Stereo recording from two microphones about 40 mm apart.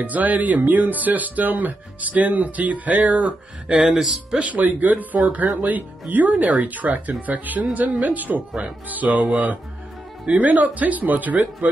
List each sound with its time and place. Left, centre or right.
0.0 s speech: right
3.3 s speech: right
3.8 s speech: centre
4.4 s speech: right